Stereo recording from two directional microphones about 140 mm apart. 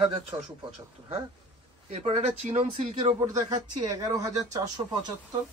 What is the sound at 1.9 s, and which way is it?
Speech, 55° right (ahead or behind).